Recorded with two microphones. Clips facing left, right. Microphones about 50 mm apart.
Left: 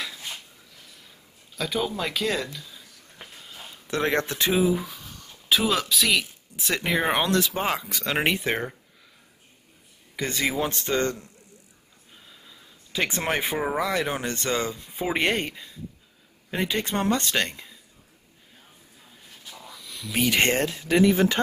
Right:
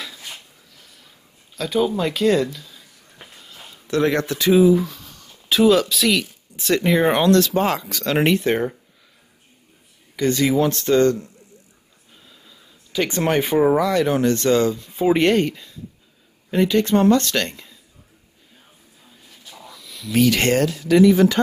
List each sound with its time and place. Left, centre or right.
0.0 s dishes: centre
1.6 s a sound: centre
3.8 s speech: left
4.7 s speech: centre
10.1 s speech: centre
12.1 s a sound: centre
13.2 s speech: centre
19.4 s a sound: centre
20.2 s speech: left